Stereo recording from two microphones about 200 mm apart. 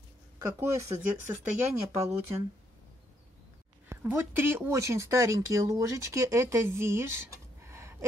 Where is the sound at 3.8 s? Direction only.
10° right (ahead or behind).